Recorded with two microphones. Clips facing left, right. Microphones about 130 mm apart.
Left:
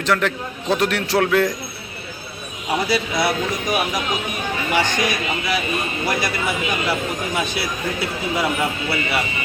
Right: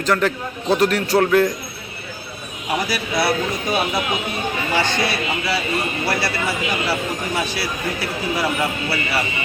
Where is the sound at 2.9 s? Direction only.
20° left (ahead or behind).